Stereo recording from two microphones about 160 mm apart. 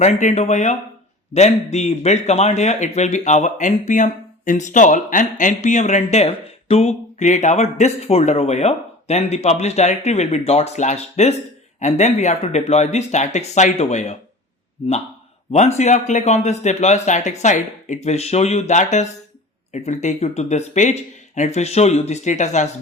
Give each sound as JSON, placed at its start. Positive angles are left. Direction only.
{"t": 0.0, "sound": "speech", "side_deg": 45}